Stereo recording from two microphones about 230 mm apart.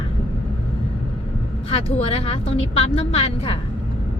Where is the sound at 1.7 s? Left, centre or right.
Left.